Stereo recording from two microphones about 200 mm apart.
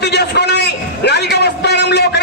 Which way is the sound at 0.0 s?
55° left (ahead or behind).